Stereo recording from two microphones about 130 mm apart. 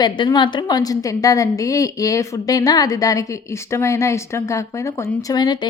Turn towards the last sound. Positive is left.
turn(degrees=35)  # may be behind; listen again after turning